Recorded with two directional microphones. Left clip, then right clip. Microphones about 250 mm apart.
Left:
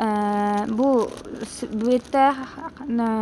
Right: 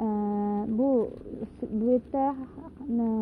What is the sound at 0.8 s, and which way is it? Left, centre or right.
Speech, left.